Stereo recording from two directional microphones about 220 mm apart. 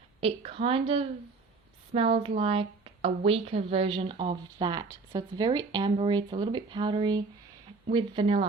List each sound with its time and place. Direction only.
0.2 s a woman's voice: 25° right (ahead or behind)